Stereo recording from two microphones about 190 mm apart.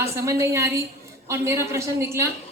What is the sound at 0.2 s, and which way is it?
A woman's voice, 15° right (ahead or behind).